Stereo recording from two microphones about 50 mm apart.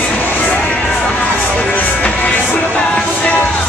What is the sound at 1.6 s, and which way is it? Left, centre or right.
Music, left.